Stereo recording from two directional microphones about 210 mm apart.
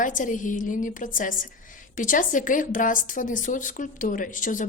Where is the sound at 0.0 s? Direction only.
40° left (ahead or behind).